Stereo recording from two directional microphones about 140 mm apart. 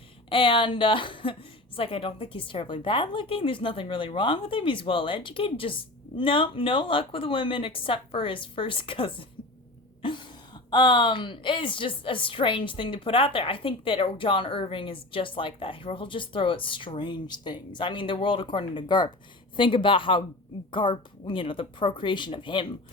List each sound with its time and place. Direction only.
0.3 s speech: 40° left (ahead or behind)